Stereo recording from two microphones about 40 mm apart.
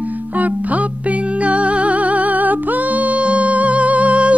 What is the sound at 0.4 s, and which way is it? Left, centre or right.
Music, right.